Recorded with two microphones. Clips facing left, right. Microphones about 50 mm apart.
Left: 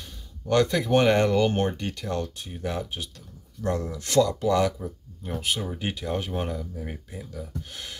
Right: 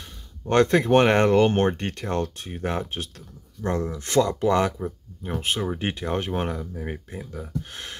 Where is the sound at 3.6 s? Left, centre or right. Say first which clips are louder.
Right 2 dB; right.